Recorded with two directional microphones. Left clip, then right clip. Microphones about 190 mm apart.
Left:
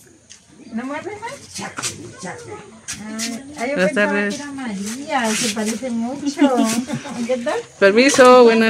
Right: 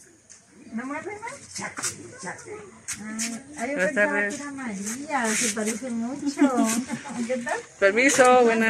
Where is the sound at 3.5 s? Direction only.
10° left (ahead or behind).